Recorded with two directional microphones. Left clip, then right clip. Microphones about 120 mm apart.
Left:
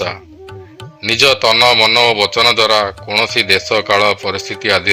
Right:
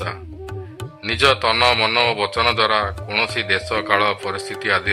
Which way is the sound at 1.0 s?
40° left (ahead or behind).